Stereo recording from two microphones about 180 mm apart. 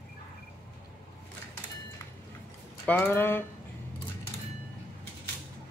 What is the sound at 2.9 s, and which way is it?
Speech, 10° left (ahead or behind).